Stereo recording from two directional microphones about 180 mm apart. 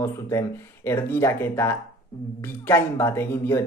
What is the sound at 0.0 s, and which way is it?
Speech, 15° left (ahead or behind).